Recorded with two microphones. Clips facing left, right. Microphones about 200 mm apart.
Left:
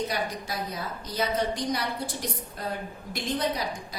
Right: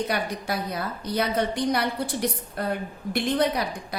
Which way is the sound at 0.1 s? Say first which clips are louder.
Right 4 dB; 60° right (ahead or behind).